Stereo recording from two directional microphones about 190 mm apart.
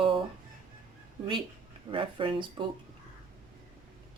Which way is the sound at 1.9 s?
25° right (ahead or behind).